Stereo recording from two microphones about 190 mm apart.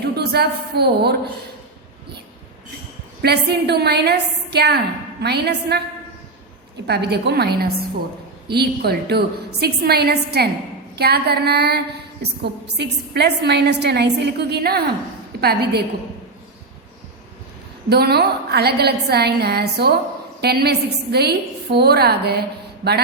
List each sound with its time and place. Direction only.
0.0 s a woman's voice: 55° right (ahead or behind)
3.2 s a woman's voice: 60° right (ahead or behind)
6.8 s a woman's voice: 60° right (ahead or behind)
17.8 s a woman's voice: 60° right (ahead or behind)